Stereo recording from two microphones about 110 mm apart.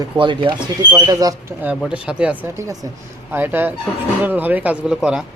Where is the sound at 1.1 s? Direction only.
30° right (ahead or behind).